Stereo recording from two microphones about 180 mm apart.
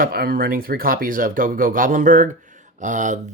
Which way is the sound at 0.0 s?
55° right (ahead or behind).